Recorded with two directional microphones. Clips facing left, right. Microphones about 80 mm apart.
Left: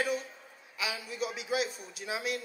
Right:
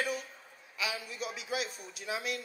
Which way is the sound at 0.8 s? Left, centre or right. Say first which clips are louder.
Left 2 dB; right.